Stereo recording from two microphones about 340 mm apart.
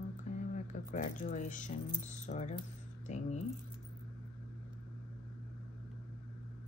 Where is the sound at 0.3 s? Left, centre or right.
Left.